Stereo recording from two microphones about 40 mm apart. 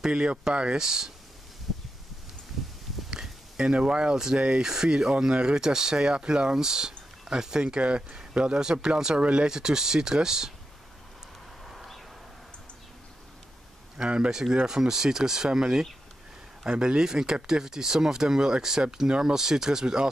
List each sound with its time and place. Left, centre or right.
0.0 s speech: right
0.7 s speech: centre
3.1 s a sound: centre
3.8 s speech: centre
11.6 s a sound: centre
13.9 s speech: right